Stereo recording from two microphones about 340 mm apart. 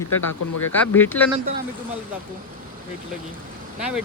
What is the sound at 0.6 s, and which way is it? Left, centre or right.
Speech, centre.